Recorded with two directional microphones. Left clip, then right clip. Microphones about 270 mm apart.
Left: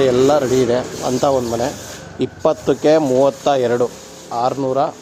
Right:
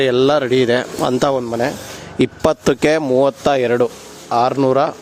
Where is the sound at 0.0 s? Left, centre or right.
Right.